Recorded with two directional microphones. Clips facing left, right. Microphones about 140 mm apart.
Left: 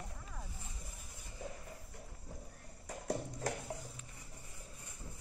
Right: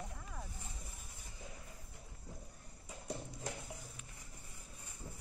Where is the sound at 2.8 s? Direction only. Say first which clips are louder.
Left 6 dB; 85° left.